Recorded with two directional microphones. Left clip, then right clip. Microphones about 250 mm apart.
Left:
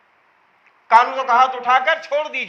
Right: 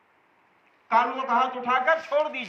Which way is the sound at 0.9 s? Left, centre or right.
Left.